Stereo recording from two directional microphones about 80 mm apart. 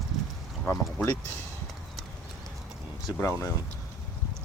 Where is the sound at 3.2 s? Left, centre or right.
Left.